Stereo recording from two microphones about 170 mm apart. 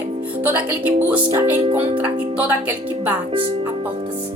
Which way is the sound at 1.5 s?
30° right (ahead or behind).